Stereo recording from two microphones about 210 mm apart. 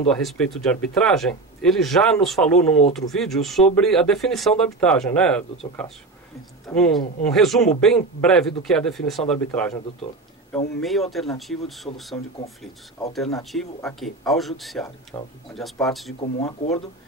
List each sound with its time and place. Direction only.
0.1 s speech: centre (ahead or behind)
6.7 s speech: 5° left (ahead or behind)
10.8 s speech: centre (ahead or behind)
13.4 s speech: centre (ahead or behind)
15.1 s speech: 15° left (ahead or behind)
15.5 s speech: centre (ahead or behind)
16.2 s speech: 30° left (ahead or behind)